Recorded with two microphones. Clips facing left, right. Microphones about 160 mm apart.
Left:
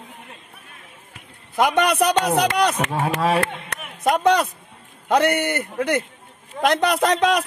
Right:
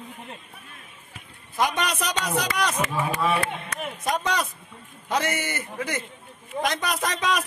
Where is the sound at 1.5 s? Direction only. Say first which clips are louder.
Left 7 dB; 60° left (ahead or behind).